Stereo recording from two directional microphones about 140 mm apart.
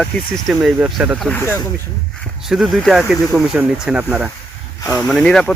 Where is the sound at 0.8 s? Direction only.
10° right (ahead or behind).